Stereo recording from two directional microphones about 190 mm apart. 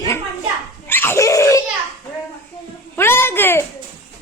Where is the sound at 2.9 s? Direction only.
10° left (ahead or behind).